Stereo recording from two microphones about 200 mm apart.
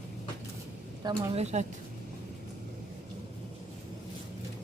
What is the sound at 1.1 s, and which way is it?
Speech, 30° right (ahead or behind).